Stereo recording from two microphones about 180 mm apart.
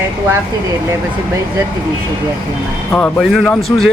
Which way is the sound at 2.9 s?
5° left (ahead or behind).